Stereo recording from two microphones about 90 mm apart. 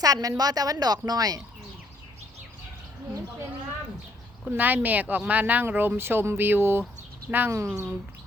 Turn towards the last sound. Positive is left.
turn(degrees=-30)  # may be behind; listen again after turning